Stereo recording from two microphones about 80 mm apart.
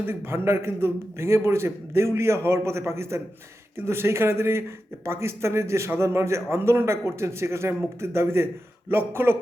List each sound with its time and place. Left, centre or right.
0.0 s a man's voice: right